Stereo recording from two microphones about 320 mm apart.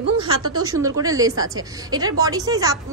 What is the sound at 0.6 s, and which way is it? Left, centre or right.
A woman's voice, centre.